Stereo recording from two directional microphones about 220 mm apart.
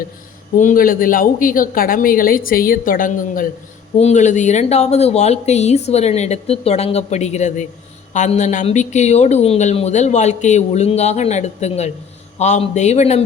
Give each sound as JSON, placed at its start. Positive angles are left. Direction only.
{"t": 0.6, "sound": "speech", "side_deg": 40}